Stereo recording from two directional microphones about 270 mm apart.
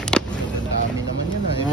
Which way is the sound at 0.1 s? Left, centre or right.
Centre.